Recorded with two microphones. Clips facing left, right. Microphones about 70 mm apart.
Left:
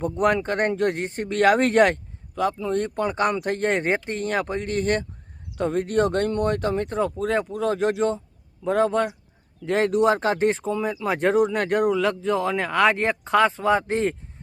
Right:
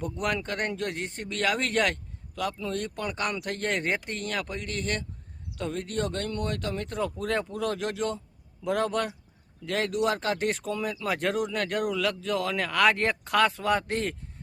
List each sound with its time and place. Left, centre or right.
0.0 s speech: left
2.3 s speech: left
2.8 s speech: left
9.6 s speech: left
11.9 s speech: left